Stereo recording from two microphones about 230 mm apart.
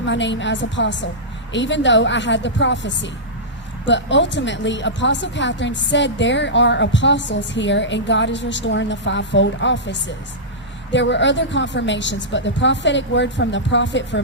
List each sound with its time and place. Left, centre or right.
0.0 s speech: left